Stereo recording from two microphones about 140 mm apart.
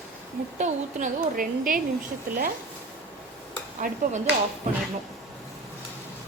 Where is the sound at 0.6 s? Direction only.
60° right (ahead or behind); by 1.8 s 80° right.